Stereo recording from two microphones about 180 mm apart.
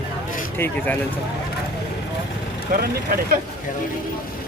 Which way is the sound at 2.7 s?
55° right (ahead or behind).